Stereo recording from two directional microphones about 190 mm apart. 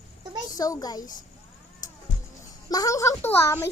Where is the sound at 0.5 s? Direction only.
20° left (ahead or behind).